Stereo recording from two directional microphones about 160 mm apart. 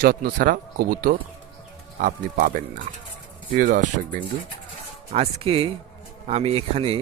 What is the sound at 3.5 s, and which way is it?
Speech, 55° right (ahead or behind).